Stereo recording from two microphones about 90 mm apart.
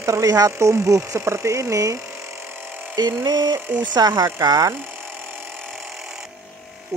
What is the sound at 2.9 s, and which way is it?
Speech, 50° right (ahead or behind).